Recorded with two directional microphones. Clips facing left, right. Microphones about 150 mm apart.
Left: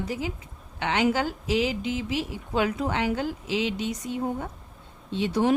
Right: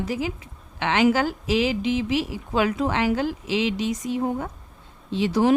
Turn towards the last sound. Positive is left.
turn(degrees=-90)